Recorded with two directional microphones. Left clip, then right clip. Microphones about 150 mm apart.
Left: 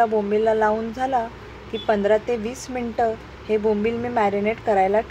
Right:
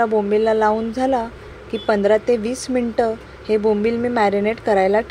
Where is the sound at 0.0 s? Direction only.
50° right (ahead or behind).